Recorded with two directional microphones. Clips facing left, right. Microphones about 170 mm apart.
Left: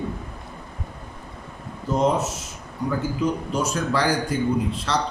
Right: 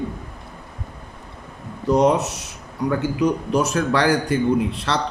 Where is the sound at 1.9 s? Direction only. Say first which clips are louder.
Right 4 dB; 75° right (ahead or behind).